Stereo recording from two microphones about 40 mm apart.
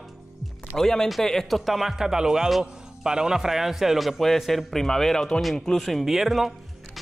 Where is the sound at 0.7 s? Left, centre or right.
Centre.